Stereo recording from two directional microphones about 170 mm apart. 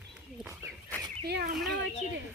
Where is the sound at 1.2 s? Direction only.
70° right (ahead or behind).